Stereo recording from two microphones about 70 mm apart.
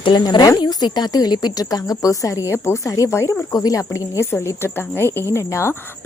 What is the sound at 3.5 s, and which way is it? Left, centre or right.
Speech, left.